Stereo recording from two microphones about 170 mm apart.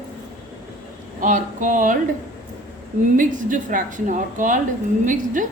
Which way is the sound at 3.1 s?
50° right (ahead or behind).